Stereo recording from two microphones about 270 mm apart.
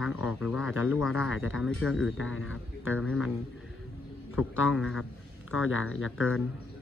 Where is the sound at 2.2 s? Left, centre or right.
Left.